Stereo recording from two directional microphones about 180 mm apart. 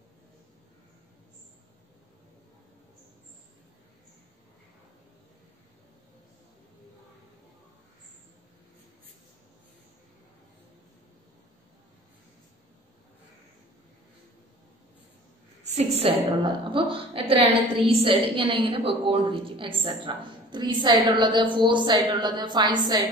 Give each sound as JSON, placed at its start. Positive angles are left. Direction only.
{"t": 15.6, "sound": "a woman's voice", "side_deg": -40}